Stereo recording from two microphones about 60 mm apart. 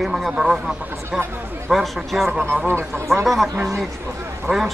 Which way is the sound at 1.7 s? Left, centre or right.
Centre.